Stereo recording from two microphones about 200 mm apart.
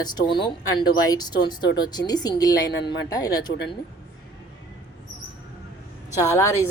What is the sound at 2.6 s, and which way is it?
Speech, 55° left (ahead or behind).